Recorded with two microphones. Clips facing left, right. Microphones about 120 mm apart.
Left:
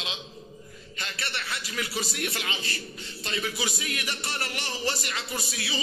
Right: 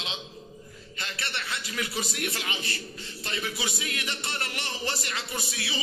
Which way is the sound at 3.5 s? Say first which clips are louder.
Left 1 dB; 25° right (ahead or behind).